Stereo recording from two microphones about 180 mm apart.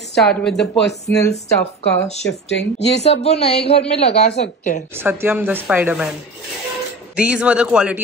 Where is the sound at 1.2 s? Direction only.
15° left (ahead or behind).